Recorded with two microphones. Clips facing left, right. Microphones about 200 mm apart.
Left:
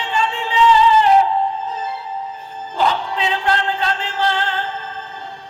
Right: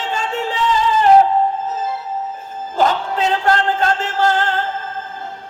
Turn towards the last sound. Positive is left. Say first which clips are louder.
# right 4 dB
turn(degrees=-45)  # may be behind; listen again after turning